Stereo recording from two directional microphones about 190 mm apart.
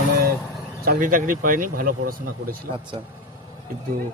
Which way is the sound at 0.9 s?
45° right (ahead or behind).